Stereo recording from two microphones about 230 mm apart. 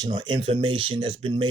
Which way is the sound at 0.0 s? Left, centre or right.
Centre.